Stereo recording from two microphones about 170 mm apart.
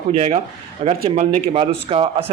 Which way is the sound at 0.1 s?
45° right (ahead or behind).